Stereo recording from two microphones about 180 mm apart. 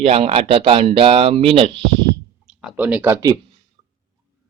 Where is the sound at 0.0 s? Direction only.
35° right (ahead or behind).